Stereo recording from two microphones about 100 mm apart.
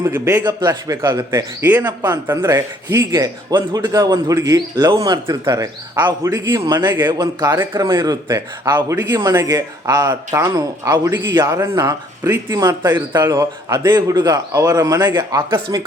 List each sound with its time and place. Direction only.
0.0 s a man's voice: 30° right (ahead or behind)
0.4 s speech: 40° right (ahead or behind)
1.6 s a man's voice: 20° right (ahead or behind)
3.1 s speech: 40° right (ahead or behind)
3.8 s speech: 30° right (ahead or behind)
7.5 s a man's voice: 25° right (ahead or behind)
7.8 s speech: 40° right (ahead or behind)
8.7 s a man's voice: 25° right (ahead or behind)
12.3 s a man's voice: 25° right (ahead or behind); by 15.9 s 40° right (ahead or behind)